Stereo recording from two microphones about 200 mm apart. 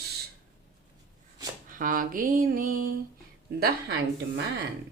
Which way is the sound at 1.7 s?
45° right (ahead or behind).